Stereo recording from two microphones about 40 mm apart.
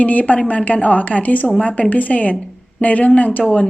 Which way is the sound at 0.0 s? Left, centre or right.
Left.